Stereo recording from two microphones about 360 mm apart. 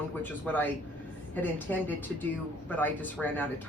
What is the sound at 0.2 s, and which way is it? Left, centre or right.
Speech, centre.